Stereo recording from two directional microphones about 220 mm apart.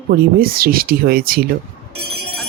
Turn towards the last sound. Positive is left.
turn(degrees=-45)  # may be behind; listen again after turning